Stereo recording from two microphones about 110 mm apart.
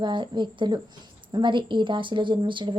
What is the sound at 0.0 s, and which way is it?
A woman's voice, 45° right (ahead or behind).